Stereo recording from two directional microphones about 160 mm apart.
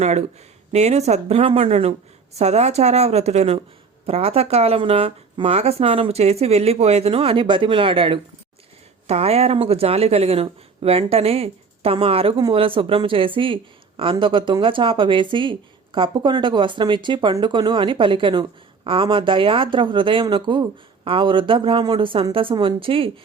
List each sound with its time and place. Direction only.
0.0 s speech: 45° right (ahead or behind)